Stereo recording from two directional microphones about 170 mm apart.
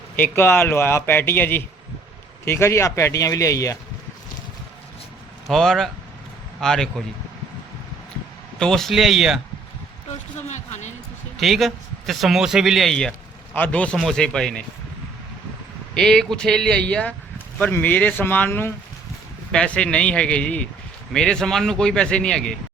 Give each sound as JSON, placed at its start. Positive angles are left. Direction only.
{"t": 0.2, "sound": "speech", "side_deg": 10}
{"t": 5.5, "sound": "a man's voice", "side_deg": 0}
{"t": 8.5, "sound": "a man's voice", "side_deg": 5}
{"t": 10.5, "sound": "speech", "side_deg": 45}
{"t": 11.3, "sound": "a man's voice", "side_deg": 0}
{"t": 16.0, "sound": "a man's voice", "side_deg": 5}